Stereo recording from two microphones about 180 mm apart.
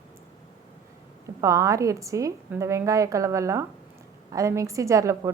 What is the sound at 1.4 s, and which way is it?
A woman's voice, 15° right (ahead or behind).